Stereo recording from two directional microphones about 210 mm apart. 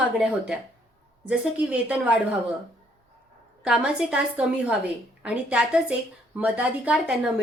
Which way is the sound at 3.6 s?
5° right (ahead or behind).